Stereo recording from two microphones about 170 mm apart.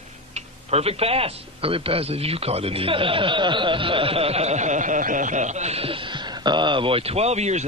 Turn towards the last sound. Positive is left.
turn(degrees=-40)  # may be behind; listen again after turning